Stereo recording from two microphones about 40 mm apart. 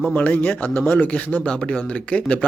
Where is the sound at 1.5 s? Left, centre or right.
Left.